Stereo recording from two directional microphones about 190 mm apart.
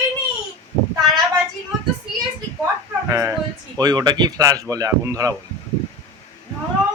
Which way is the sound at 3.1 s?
15° right (ahead or behind).